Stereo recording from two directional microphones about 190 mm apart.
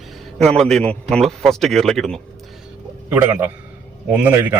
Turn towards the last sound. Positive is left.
turn(degrees=-10)  # may be behind; listen again after turning